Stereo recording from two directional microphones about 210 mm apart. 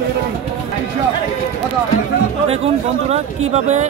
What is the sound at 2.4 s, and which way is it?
Speech, 30° right (ahead or behind).